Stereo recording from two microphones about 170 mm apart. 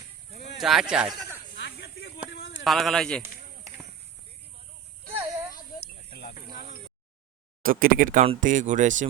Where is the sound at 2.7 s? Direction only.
Centre (ahead or behind).